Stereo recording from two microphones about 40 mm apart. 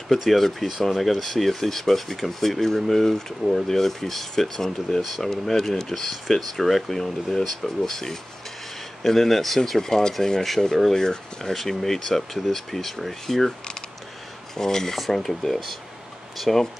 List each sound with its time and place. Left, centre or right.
0.1 s speech: centre
5.0 s speech: centre